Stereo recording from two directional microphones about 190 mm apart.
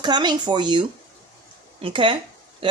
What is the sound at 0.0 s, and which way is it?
Speech, 20° right (ahead or behind).